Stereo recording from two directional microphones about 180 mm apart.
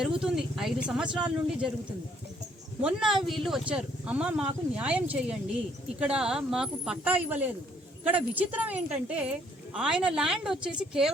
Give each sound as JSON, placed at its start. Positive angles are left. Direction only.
{"t": 0.0, "sound": "speech", "side_deg": -5}
{"t": 2.8, "sound": "speech", "side_deg": 0}